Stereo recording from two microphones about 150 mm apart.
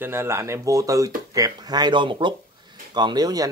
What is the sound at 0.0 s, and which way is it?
Speech, 15° right (ahead or behind).